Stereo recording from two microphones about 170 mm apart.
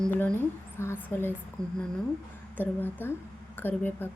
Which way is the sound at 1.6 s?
20° right (ahead or behind).